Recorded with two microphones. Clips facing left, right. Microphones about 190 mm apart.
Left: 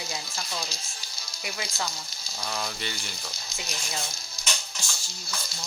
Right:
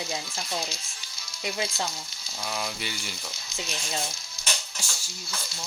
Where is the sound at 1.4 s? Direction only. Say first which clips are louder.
Right 5 dB; 25° right (ahead or behind).